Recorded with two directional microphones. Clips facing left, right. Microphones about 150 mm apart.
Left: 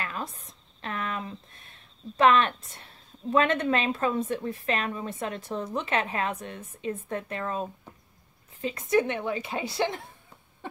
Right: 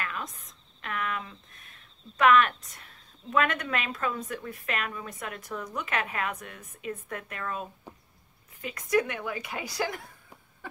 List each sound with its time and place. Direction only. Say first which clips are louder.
0.0 s speech: left 2 dB; 30° left (ahead or behind)